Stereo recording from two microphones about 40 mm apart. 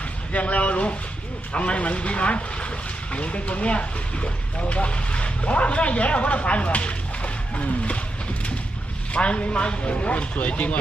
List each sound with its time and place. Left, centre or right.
0.3 s speech: left
9.1 s speech: left